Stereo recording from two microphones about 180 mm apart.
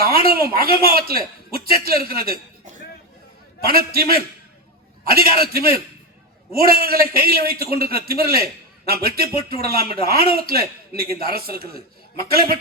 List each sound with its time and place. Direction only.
0.3 s a man's voice: 55° right (ahead or behind)
3.7 s a man's voice: 55° right (ahead or behind)
5.0 s a man's voice: 60° right (ahead or behind)